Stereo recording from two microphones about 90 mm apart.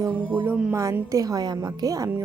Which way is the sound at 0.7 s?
35° right (ahead or behind).